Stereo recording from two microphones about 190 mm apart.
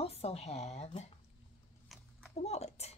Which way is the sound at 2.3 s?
35° left (ahead or behind).